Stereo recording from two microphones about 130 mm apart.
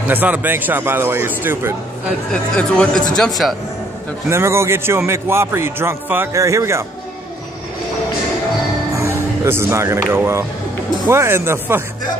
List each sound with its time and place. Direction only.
0.1 s a man's voice: 15° right (ahead or behind)
2.5 s speech: 5° left (ahead or behind)
4.3 s a man's voice: 20° right (ahead or behind)
8.9 s a man's voice: 25° right (ahead or behind)